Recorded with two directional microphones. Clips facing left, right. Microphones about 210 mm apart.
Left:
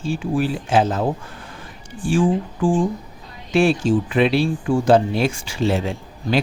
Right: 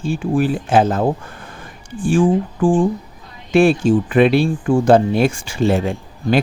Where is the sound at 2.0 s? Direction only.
55° right (ahead or behind).